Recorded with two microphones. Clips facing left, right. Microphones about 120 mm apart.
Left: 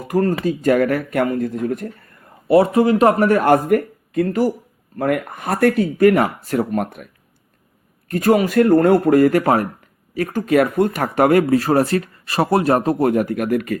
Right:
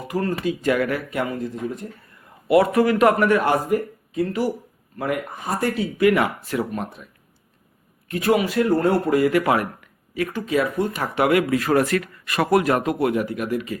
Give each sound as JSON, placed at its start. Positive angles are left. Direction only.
{"t": 0.1, "sound": "speech", "side_deg": 45}
{"t": 2.5, "sound": "speech", "side_deg": 30}
{"t": 8.0, "sound": "speech", "side_deg": 45}